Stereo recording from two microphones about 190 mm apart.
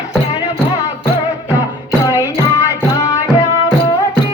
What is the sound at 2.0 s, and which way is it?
Music, 15° left (ahead or behind).